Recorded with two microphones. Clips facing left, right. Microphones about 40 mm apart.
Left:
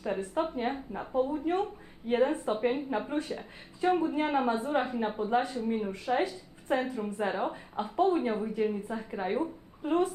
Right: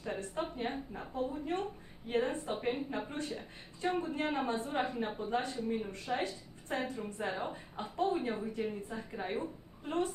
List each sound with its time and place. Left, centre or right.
0.0 s a woman's voice: centre